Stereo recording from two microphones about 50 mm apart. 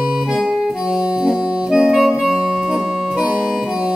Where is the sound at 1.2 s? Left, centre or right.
Centre.